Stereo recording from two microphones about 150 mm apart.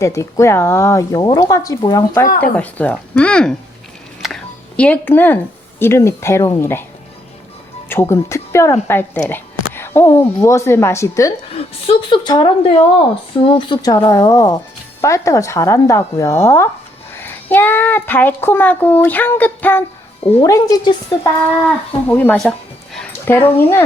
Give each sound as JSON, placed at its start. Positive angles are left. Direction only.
{"t": 0.0, "sound": "speech", "side_deg": 20}
{"t": 2.4, "sound": "speech", "side_deg": 10}
{"t": 4.2, "sound": "a sound", "side_deg": 0}
{"t": 4.8, "sound": "speech", "side_deg": 10}
{"t": 7.9, "sound": "speech", "side_deg": 15}
{"t": 11.5, "sound": "a woman's voice", "side_deg": 40}
{"t": 20.4, "sound": "speech", "side_deg": 25}
{"t": 22.0, "sound": "speech", "side_deg": 10}
{"t": 23.2, "sound": "speech", "side_deg": 15}